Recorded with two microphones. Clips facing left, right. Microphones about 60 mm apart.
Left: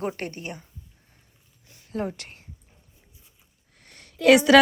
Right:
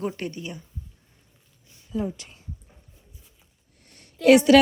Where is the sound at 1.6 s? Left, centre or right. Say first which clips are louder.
Right 1 dB; left.